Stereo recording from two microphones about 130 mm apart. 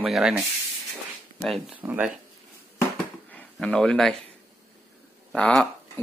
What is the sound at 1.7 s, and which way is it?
Speech, 15° right (ahead or behind).